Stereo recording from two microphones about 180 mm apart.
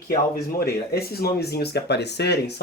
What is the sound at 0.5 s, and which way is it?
Speech, 60° left (ahead or behind).